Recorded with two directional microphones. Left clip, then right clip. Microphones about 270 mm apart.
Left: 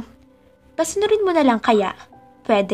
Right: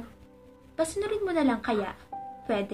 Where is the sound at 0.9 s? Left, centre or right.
Left.